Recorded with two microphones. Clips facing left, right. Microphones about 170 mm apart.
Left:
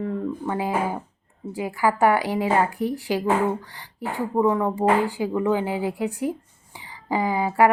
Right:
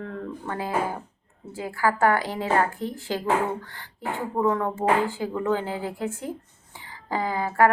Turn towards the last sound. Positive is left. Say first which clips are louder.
# left 2 dB
turn(degrees=15)  # may be behind; listen again after turning